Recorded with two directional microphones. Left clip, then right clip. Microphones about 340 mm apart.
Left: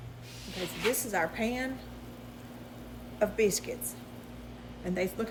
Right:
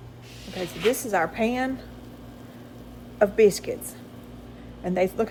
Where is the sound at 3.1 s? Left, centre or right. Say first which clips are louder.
Right 9 dB; centre.